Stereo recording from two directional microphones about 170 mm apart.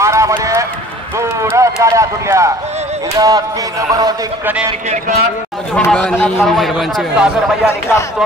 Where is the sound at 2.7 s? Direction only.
40° right (ahead or behind).